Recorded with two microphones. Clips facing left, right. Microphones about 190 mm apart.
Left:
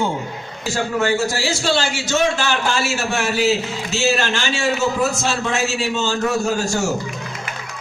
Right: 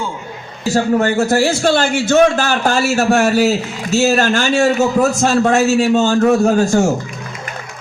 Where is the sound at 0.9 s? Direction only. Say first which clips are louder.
Right 4 dB; 55° right (ahead or behind).